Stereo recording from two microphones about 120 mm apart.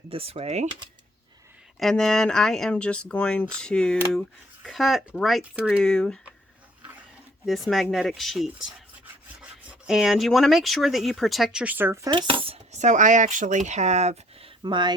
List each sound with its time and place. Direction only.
0.1 s speech: 50° right (ahead or behind)
1.8 s speech: 5° left (ahead or behind)
5.8 s speech: 5° left (ahead or behind)
7.4 s speech: centre (ahead or behind)
12.1 s speech: 45° right (ahead or behind)
12.7 s speech: 85° right; by 14.5 s 60° right (ahead or behind)
14.6 s speech: 40° right (ahead or behind)